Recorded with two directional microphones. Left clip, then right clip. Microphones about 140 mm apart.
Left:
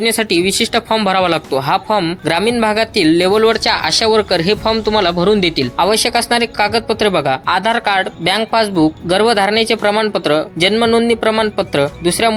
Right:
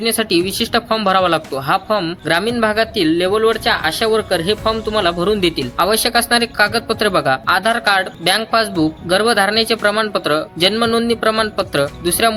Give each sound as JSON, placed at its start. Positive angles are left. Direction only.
{"t": 0.0, "sound": "speech", "side_deg": 20}
{"t": 5.7, "sound": "speech", "side_deg": 20}